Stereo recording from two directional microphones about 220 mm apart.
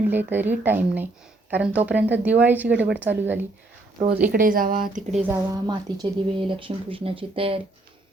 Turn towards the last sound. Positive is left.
turn(degrees=-25)  # may be behind; listen again after turning